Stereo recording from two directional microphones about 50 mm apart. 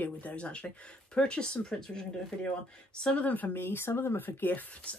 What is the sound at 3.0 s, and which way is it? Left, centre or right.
Speech, left.